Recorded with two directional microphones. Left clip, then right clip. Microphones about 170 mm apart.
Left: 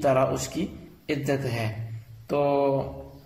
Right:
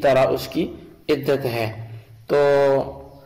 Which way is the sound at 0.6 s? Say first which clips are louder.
Right 8 dB; 30° right (ahead or behind).